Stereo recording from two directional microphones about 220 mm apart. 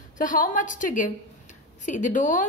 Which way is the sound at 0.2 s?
35° left (ahead or behind).